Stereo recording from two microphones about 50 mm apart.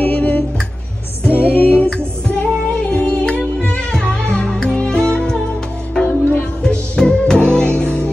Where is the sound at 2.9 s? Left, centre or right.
Left.